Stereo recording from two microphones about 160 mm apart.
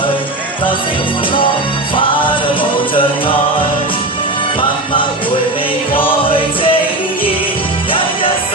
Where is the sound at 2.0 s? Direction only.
30° left (ahead or behind).